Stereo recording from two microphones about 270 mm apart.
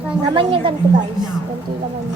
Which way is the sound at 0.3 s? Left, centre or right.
Centre.